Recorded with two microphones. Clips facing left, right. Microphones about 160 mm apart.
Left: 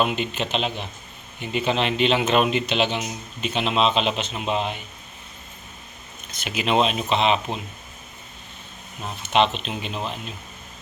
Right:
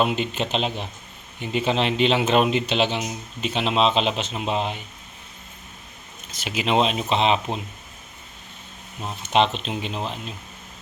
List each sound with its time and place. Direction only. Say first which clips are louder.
0.2 s speech: right 1 dB; 30° right (ahead or behind)
6.5 s speech: even; 25° right (ahead or behind)
9.3 s speech: even; 30° right (ahead or behind)